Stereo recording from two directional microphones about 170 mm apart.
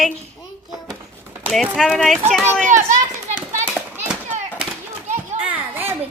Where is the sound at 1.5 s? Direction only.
Centre (ahead or behind).